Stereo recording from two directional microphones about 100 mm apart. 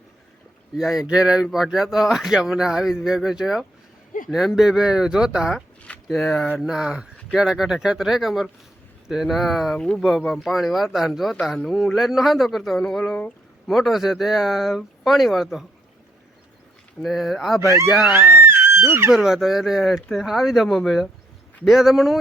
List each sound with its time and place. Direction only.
0.8 s speech: 5° right (ahead or behind)
5.8 s a sound: 10° left (ahead or behind)
6.3 s speech: 10° left (ahead or behind)
6.7 s speech: 5° right (ahead or behind)
17.0 s speech: centre (ahead or behind)
18.1 s speech: 20° right (ahead or behind)
19.1 s speech: 5° right (ahead or behind)